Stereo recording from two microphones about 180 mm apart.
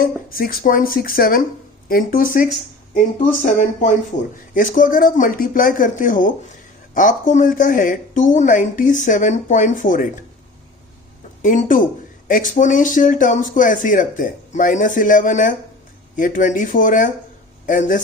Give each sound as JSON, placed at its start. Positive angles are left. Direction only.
{"t": 0.0, "sound": "speech", "side_deg": 55}
{"t": 11.4, "sound": "speech", "side_deg": 50}